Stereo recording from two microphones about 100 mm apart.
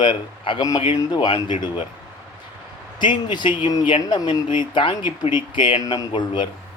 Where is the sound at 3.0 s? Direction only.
50° left (ahead or behind).